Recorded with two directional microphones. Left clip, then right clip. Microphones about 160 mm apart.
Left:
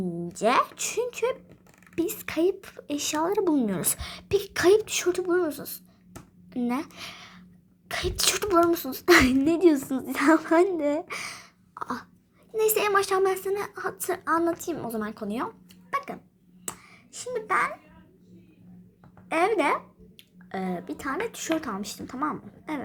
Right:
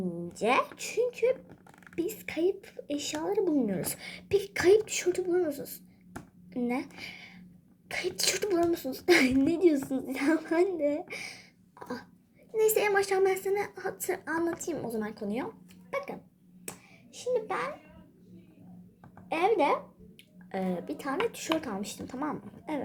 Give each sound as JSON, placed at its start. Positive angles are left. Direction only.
{"t": 0.3, "sound": "a woman's voice", "side_deg": 40}
{"t": 15.9, "sound": "dog", "side_deg": 45}
{"t": 17.2, "sound": "speech", "side_deg": 45}
{"t": 19.4, "sound": "a woman's voice", "side_deg": 45}